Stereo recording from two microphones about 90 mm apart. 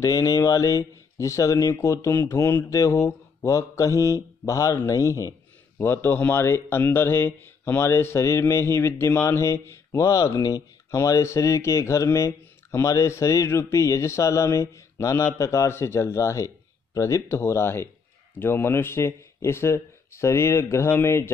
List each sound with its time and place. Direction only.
0.0 s speech: 40° left (ahead or behind)
5.8 s speech: 25° left (ahead or behind)